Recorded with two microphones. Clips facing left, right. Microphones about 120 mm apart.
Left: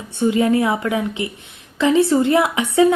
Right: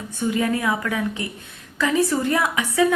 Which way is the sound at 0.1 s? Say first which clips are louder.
Left 6 dB; 25° left (ahead or behind).